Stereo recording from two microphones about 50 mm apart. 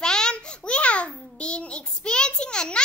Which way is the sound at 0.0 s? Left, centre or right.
Centre.